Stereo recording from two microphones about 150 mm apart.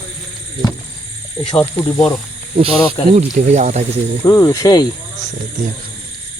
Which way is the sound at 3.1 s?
45° right (ahead or behind).